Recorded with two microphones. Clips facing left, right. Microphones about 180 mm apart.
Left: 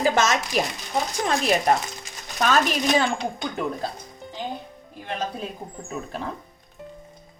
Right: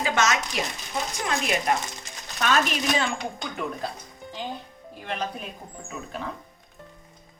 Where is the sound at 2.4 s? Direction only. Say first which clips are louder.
Left 3 dB; 35° left (ahead or behind).